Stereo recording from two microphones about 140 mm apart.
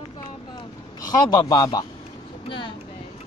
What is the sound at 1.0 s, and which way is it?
Speech, 25° left (ahead or behind).